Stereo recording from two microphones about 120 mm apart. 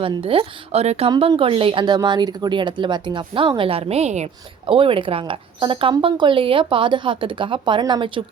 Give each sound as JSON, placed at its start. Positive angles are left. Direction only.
{"t": 0.0, "sound": "speech", "side_deg": -50}
{"t": 1.4, "sound": "speech", "side_deg": -50}
{"t": 4.6, "sound": "speech", "side_deg": -45}